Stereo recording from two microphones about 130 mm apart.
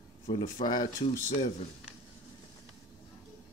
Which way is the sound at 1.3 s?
60° left (ahead or behind).